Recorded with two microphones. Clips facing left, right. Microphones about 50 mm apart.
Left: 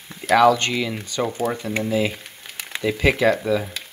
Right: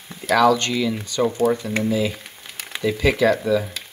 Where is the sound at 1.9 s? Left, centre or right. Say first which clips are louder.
Left 1 dB; left.